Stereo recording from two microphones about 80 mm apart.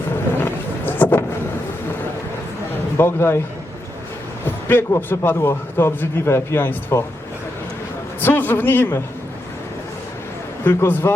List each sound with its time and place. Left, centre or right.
0.4 s thunder: left
3.0 s a man's voice: left
4.7 s a man's voice: left
8.2 s a man's voice: left
10.6 s a man's voice: left